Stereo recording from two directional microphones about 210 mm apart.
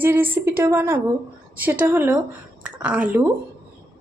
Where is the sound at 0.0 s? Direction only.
10° right (ahead or behind).